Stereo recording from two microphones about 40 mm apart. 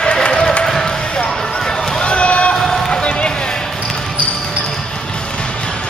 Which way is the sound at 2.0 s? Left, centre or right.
Left.